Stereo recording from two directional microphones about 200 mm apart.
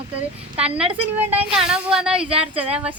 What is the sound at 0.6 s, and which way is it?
Speech, 5° right (ahead or behind).